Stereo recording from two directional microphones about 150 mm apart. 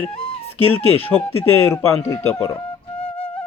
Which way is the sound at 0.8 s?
40° left (ahead or behind).